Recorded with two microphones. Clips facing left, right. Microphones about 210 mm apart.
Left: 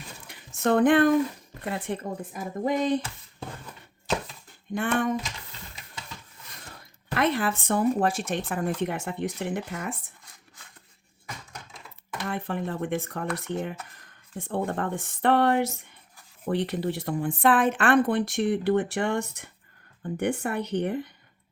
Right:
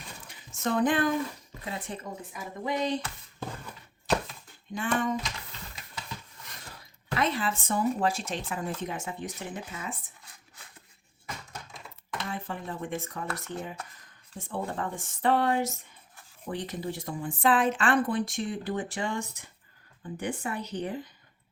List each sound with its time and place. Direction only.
0.3 s a sound: 60° left (ahead or behind)
1.6 s speech: 60° left (ahead or behind)
4.7 s speech: 60° left (ahead or behind)
7.1 s speech: 60° left (ahead or behind)
12.3 s speech: 60° left (ahead or behind)